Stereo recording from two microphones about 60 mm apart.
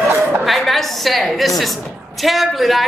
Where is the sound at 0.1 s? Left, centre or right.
Right.